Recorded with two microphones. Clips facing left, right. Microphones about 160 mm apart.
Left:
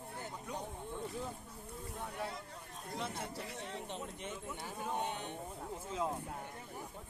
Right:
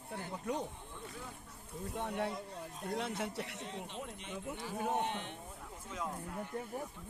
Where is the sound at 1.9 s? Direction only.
70° right (ahead or behind).